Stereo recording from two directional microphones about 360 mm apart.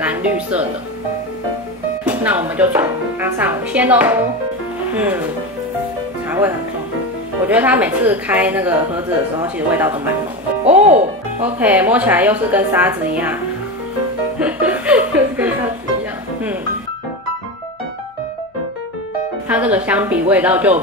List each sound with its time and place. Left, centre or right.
0.0 s a woman's voice: centre
2.0 s a woman's voice: centre
7.4 s a woman's voice: centre
10.6 s speech: centre
11.4 s a woman's voice: centre
14.4 s speech: centre
19.5 s a woman's voice: centre